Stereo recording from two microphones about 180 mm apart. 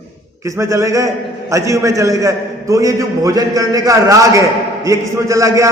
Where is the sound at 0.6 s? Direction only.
15° right (ahead or behind).